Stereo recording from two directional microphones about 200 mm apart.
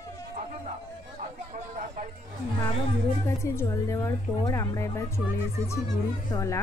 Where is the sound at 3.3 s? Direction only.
15° left (ahead or behind).